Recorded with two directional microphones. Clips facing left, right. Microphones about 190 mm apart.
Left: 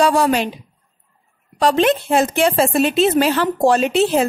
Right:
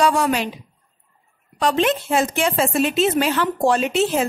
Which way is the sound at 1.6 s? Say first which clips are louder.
Left 4 dB; 35° left (ahead or behind).